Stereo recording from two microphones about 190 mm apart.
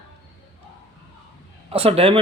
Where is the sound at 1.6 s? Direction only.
30° right (ahead or behind).